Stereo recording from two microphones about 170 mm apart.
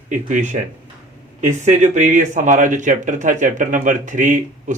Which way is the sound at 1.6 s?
45° right (ahead or behind).